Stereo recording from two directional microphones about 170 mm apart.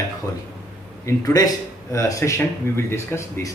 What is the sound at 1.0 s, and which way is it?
Speech, 20° left (ahead or behind).